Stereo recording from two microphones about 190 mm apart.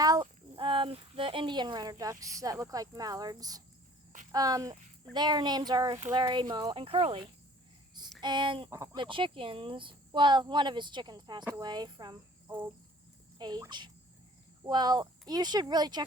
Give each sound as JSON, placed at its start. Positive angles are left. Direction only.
{"t": 0.0, "sound": "speech", "side_deg": -20}
{"t": 8.7, "sound": "speech", "side_deg": -15}
{"t": 9.0, "sound": "speech", "side_deg": -25}